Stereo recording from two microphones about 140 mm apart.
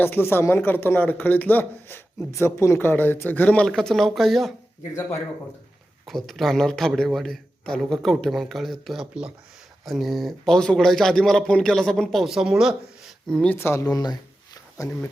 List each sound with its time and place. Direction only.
0.0 s a man's voice: 15° left (ahead or behind); by 4.5 s centre (ahead or behind)
6.1 s speech: centre (ahead or behind)
13.5 s speech: 20° left (ahead or behind)